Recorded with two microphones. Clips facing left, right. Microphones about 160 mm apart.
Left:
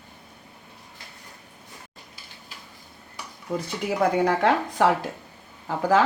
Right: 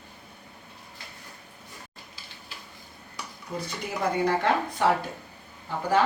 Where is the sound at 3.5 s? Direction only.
75° left (ahead or behind).